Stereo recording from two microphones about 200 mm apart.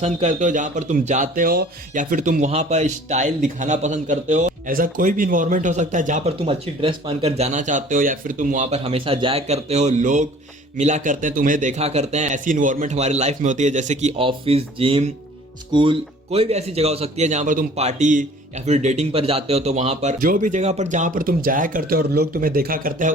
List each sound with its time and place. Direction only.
0.0 s speech: 35° right (ahead or behind)